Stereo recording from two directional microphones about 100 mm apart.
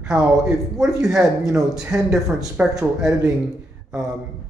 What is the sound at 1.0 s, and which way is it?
Speech, 5° right (ahead or behind).